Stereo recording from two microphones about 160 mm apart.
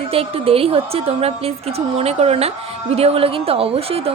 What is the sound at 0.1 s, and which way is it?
A woman's voice, 35° right (ahead or behind).